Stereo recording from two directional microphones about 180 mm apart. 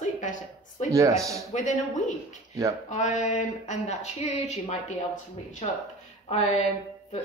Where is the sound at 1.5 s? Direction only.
45° left (ahead or behind).